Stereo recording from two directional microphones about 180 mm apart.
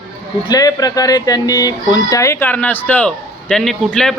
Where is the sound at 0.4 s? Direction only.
20° left (ahead or behind).